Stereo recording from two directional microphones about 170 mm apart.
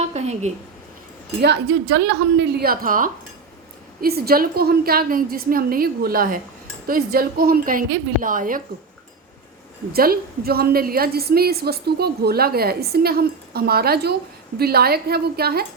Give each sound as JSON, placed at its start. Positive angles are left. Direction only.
{"t": 0.0, "sound": "a woman's voice", "side_deg": -40}
{"t": 1.4, "sound": "a woman's voice", "side_deg": -85}
{"t": 4.0, "sound": "a woman's voice", "side_deg": -65}
{"t": 9.9, "sound": "a woman's voice", "side_deg": -60}